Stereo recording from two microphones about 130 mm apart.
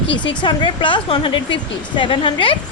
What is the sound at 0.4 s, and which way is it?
A woman's voice, 40° left (ahead or behind).